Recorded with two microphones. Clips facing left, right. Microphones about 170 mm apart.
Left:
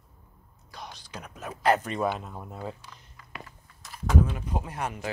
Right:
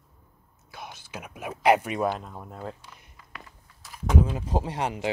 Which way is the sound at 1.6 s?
10° right (ahead or behind).